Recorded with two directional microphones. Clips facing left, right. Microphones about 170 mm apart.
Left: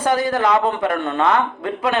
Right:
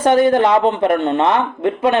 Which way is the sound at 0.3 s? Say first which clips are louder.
Right 5 dB; 25° right (ahead or behind).